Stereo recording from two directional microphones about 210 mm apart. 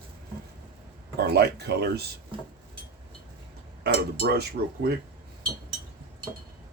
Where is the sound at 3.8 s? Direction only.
50° right (ahead or behind).